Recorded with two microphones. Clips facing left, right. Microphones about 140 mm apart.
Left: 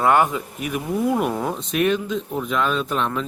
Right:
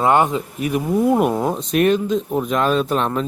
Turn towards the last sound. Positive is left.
turn(degrees=-40)  # may be behind; listen again after turning